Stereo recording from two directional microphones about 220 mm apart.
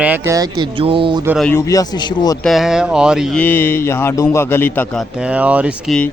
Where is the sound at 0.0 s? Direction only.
10° right (ahead or behind).